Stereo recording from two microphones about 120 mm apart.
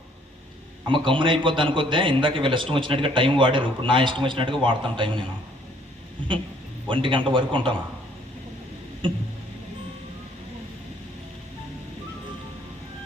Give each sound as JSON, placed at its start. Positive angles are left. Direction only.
{"t": 0.9, "sound": "a man's voice", "side_deg": -45}
{"t": 6.8, "sound": "a man's voice", "side_deg": -45}